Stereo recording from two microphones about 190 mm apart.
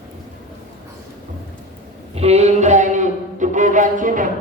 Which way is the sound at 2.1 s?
35° right (ahead or behind).